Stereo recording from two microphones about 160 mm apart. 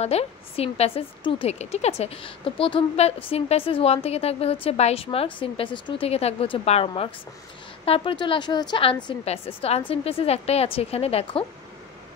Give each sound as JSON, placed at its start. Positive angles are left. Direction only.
{"t": 0.0, "sound": "a woman's voice", "side_deg": 40}